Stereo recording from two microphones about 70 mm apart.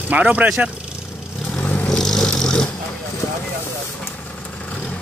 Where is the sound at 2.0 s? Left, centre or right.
Centre.